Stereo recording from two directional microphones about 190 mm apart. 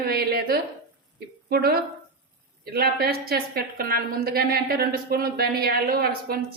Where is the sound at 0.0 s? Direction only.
55° right (ahead or behind).